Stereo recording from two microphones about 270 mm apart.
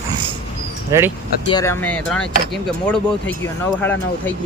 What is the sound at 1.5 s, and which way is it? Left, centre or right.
Speech, centre.